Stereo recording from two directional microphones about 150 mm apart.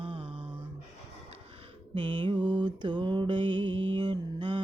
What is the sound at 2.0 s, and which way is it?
Mantra, 35° right (ahead or behind).